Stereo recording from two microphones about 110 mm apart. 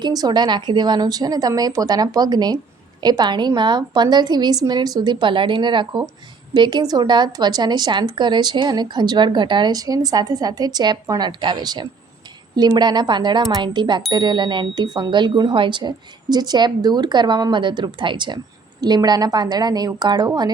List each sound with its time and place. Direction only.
0.0 s a woman's voice: 35° right (ahead or behind)